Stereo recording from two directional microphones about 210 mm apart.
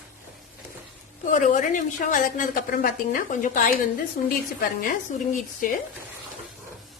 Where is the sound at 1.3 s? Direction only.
35° left (ahead or behind).